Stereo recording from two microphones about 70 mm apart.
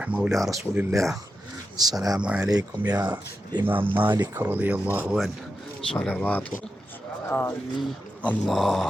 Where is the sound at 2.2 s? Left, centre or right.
Centre.